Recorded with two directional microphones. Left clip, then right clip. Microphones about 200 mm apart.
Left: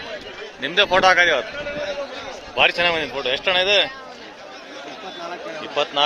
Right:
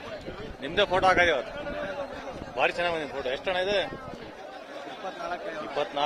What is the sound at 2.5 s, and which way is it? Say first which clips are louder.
A man's voice: left 9 dB; centre (ahead or behind).